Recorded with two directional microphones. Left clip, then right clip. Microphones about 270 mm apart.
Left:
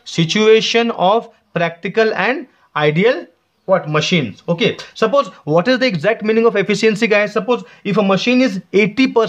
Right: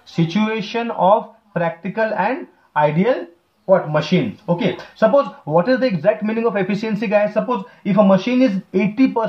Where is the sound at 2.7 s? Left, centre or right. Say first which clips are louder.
Left 2 dB; left.